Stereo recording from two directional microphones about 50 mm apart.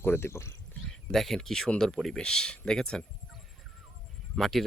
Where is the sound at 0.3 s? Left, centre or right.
Left.